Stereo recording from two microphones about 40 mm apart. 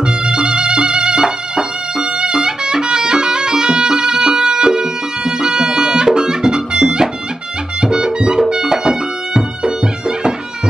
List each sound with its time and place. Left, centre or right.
0.2 s music: right